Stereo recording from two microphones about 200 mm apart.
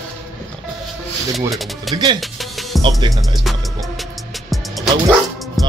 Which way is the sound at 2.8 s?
25° right (ahead or behind).